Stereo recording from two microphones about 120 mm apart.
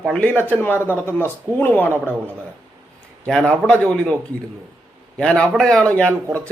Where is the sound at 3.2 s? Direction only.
10° left (ahead or behind).